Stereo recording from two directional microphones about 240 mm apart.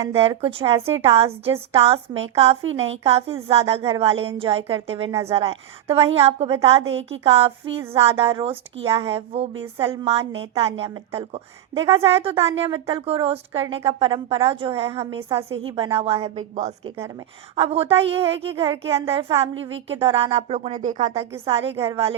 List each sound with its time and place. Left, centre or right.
0.1 s a woman's voice: right
19.1 s a woman's voice: right